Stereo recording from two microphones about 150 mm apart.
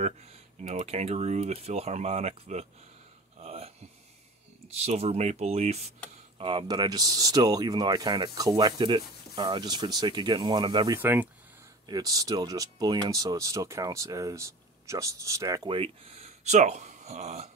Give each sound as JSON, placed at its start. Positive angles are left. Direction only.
{"t": 0.0, "sound": "speech", "side_deg": -45}
{"t": 3.3, "sound": "a sound", "side_deg": -45}
{"t": 4.6, "sound": "speech", "side_deg": -45}
{"t": 6.3, "sound": "speech", "side_deg": -35}
{"t": 11.0, "sound": "speech", "side_deg": -10}
{"t": 11.8, "sound": "speech", "side_deg": -25}
{"t": 15.6, "sound": "speech", "side_deg": -35}